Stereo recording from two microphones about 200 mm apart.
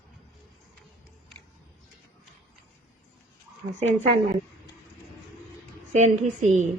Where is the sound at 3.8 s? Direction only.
35° right (ahead or behind).